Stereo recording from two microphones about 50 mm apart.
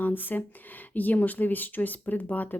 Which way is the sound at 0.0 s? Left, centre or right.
Left.